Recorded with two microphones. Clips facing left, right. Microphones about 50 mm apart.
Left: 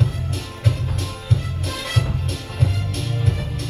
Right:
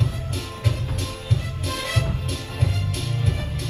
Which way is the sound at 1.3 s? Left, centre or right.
Left.